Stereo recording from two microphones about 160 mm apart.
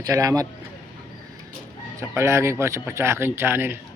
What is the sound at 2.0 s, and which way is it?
Speech, 15° right (ahead or behind).